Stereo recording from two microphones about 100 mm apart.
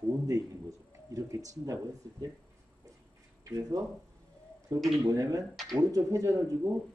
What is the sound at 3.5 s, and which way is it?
Speech, 35° right (ahead or behind).